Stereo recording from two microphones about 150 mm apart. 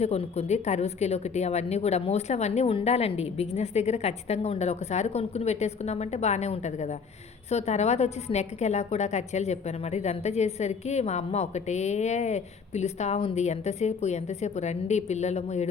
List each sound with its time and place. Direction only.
0.0 s a woman's voice: 45° left (ahead or behind)